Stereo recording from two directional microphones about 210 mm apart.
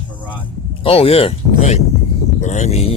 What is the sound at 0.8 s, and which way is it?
Speech, 25° left (ahead or behind).